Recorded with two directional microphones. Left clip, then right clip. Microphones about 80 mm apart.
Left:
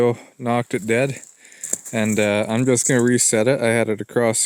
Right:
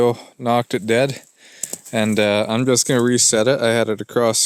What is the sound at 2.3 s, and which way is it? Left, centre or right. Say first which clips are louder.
Speech: right 2 dB; right.